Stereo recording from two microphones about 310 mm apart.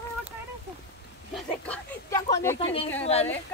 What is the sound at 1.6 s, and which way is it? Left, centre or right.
Speech, centre.